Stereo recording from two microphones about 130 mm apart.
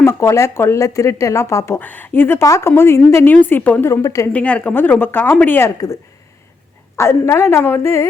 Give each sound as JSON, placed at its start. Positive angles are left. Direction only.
{"t": 0.0, "sound": "a woman's voice", "side_deg": 20}
{"t": 4.3, "sound": "a woman's voice", "side_deg": 10}
{"t": 6.9, "sound": "speech", "side_deg": 20}